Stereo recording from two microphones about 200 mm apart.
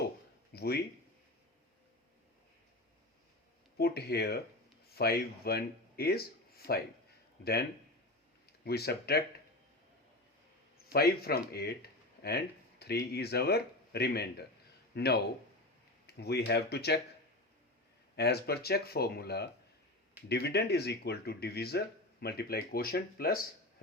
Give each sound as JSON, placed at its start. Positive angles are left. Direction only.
{"t": 0.5, "sound": "speech", "side_deg": 55}
{"t": 3.8, "sound": "speech", "side_deg": 50}
{"t": 8.6, "sound": "speech", "side_deg": 50}
{"t": 10.9, "sound": "speech", "side_deg": 50}
{"t": 18.2, "sound": "speech", "side_deg": 55}